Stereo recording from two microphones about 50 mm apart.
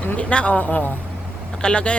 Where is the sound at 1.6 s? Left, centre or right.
Left.